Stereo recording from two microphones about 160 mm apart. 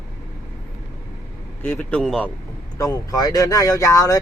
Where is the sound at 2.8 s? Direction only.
20° left (ahead or behind).